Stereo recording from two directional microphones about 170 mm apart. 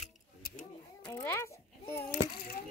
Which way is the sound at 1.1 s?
15° left (ahead or behind).